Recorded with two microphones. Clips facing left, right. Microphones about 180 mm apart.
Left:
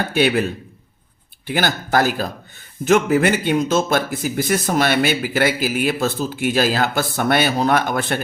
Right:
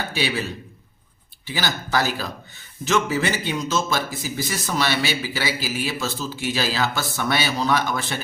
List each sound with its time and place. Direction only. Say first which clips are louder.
0.1 s a man's voice: left 8 dB; 60° left (ahead or behind)